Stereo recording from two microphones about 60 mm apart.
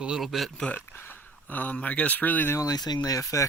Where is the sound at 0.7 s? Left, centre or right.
Left.